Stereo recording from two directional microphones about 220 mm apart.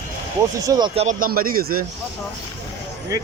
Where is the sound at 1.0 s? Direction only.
40° right (ahead or behind).